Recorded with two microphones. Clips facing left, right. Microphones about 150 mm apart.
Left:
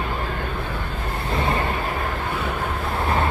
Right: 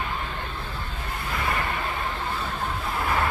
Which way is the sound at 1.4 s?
30° left (ahead or behind).